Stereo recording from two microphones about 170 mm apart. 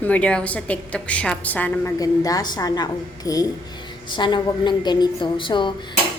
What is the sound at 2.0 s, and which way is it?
A woman's voice, 20° left (ahead or behind).